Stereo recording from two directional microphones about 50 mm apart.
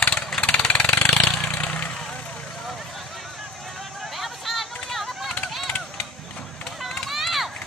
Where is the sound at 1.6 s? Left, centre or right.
Left.